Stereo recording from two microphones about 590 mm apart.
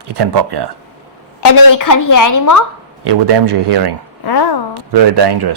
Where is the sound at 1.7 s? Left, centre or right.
Left.